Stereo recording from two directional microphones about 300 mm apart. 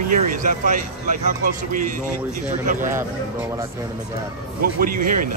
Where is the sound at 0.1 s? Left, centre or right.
Right.